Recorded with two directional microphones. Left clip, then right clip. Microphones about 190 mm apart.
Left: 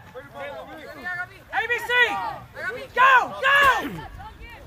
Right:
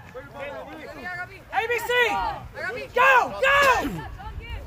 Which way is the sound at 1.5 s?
55° right (ahead or behind).